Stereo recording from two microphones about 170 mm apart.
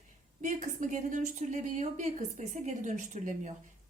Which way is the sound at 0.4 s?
45° right (ahead or behind).